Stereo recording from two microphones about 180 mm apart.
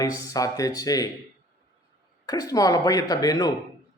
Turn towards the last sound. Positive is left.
turn(degrees=20)  # may be behind; listen again after turning